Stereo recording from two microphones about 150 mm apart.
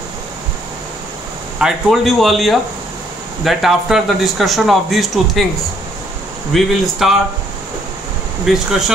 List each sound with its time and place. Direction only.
1.6 s speech: centre (ahead or behind)
6.5 s speech: centre (ahead or behind)
8.5 s speech: centre (ahead or behind)